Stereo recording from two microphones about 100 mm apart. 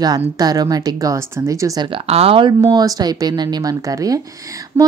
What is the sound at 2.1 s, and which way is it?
Speech, 75° right (ahead or behind).